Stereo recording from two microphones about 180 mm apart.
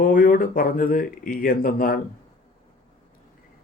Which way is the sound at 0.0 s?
50° left (ahead or behind).